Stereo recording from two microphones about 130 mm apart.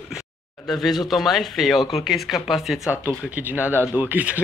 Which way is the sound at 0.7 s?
Centre (ahead or behind).